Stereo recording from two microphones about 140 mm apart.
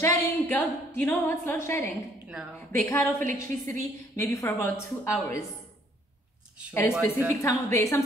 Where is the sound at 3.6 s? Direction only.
20° left (ahead or behind).